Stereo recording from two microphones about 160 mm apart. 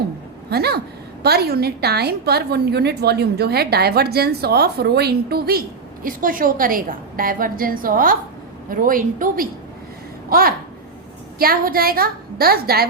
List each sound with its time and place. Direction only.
0.5 s a woman's voice: 80° right; by 9.5 s 60° right (ahead or behind)
10.2 s a sound: 65° right (ahead or behind)
11.3 s a woman's voice: 65° right (ahead or behind)